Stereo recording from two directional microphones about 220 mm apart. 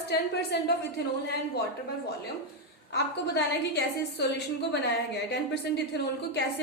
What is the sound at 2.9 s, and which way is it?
A woman's voice, 50° left (ahead or behind).